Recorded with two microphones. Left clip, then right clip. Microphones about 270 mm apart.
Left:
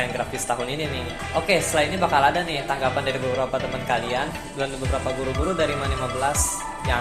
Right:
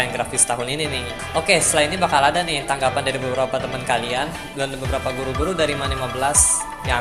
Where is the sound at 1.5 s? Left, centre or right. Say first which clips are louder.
Right 4 dB; right.